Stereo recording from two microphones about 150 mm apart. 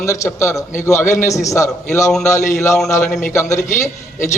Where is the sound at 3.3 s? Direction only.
20° left (ahead or behind).